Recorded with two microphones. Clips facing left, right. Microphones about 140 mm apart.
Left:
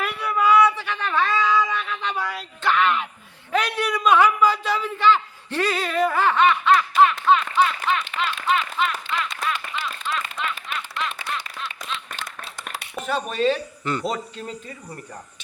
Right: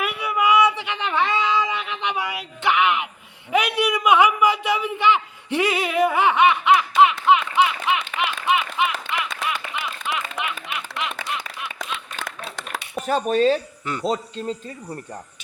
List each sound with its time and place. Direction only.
0.0 s a sound: 10° right (ahead or behind)
8.9 s clapping: 70° right (ahead or behind)
9.5 s clapping: 10° right (ahead or behind)
10.4 s a sound: 15° right (ahead or behind)
11.1 s clapping: 55° right (ahead or behind)
13.1 s speech: 40° right (ahead or behind)
13.8 s speech: 10° right (ahead or behind)